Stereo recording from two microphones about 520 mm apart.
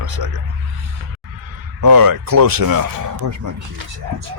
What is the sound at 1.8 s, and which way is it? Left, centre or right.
A man's voice, right.